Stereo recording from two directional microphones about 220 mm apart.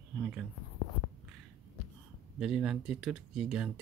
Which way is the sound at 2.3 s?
5° right (ahead or behind).